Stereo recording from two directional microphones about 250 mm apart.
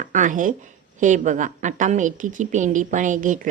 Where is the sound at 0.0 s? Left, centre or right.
Right.